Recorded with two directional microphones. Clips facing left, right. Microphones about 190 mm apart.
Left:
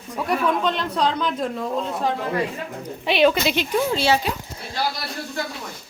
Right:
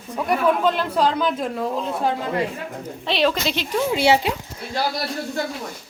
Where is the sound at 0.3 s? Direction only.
5° right (ahead or behind).